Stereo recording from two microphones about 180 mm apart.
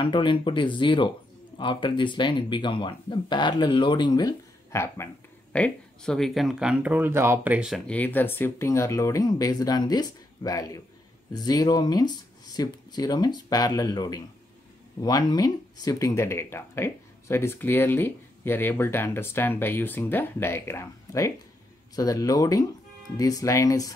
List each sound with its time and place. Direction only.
0.0 s speech: 25° left (ahead or behind)